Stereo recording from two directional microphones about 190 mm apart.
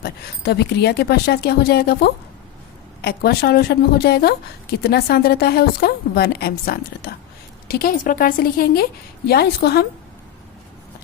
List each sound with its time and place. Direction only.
0.0 s a woman's voice: 60° left (ahead or behind)